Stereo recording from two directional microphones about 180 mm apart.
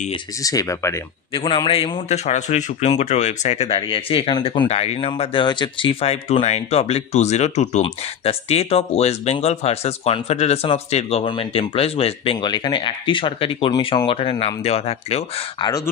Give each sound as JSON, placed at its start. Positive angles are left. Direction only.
{"t": 0.4, "sound": "a man's voice", "side_deg": 20}